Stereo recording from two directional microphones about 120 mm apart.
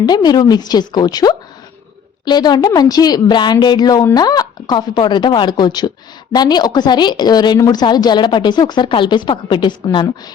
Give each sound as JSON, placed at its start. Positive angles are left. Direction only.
{"t": 0.0, "sound": "a woman's voice", "side_deg": 35}